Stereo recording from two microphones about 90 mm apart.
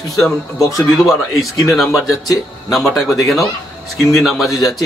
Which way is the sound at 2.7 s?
Centre (ahead or behind).